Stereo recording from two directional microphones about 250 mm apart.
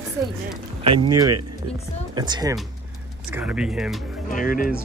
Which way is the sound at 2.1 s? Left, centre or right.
Centre.